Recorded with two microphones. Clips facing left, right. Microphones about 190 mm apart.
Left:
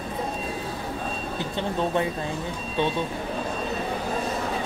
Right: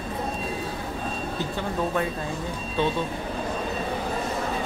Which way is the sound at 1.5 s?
20° left (ahead or behind).